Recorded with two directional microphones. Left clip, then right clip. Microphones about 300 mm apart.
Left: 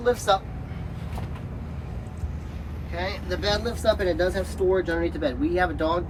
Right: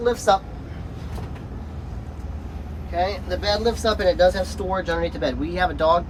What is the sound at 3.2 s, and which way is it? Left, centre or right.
Speech, right.